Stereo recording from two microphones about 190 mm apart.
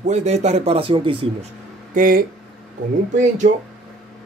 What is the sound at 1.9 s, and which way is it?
Speech, 45° right (ahead or behind).